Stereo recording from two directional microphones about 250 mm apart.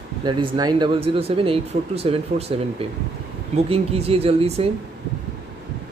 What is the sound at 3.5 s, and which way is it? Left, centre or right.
Speech, right.